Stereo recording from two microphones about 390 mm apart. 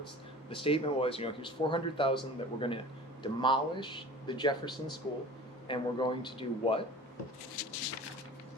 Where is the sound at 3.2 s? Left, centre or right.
Centre.